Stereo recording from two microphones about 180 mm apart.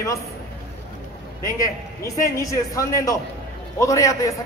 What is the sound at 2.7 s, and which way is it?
A man's voice, 20° left (ahead or behind).